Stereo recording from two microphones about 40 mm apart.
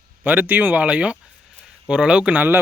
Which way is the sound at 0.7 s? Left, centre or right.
Right.